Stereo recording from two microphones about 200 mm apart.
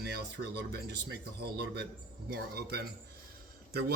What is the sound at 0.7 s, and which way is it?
A man's voice, 55° right (ahead or behind).